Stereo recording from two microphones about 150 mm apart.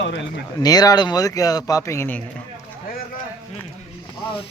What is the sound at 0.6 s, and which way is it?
A man's voice, 25° left (ahead or behind).